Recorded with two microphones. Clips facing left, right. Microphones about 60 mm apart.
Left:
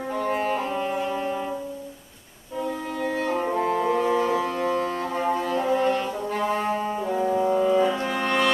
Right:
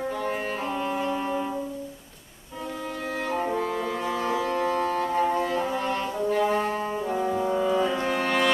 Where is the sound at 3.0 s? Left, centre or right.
Centre.